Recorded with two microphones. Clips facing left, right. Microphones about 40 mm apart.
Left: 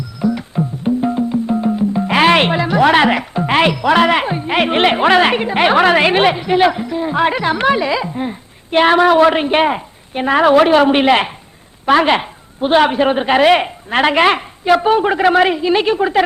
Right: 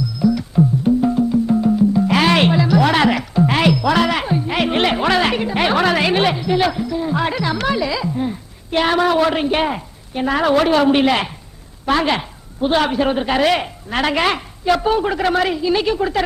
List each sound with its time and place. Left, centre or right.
0.2 s music: left
10.5 s a woman's voice: left